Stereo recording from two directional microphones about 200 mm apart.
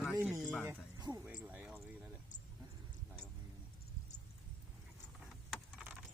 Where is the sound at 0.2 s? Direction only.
15° right (ahead or behind).